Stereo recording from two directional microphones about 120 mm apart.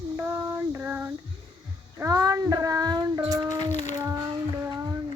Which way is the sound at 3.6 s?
80° left.